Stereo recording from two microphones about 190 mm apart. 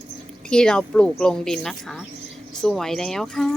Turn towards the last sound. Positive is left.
turn(degrees=0)  # may be behind; listen again after turning